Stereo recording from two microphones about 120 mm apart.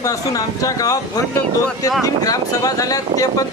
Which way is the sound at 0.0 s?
30° left (ahead or behind).